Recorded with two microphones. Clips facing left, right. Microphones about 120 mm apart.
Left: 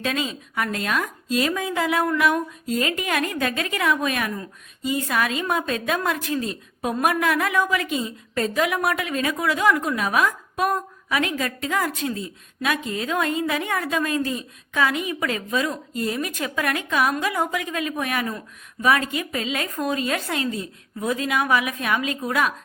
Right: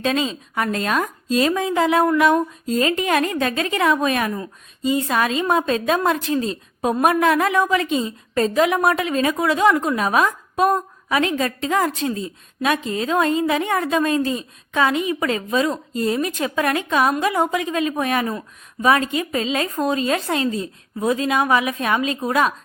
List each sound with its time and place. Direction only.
0.0 s a woman's voice: 30° right (ahead or behind)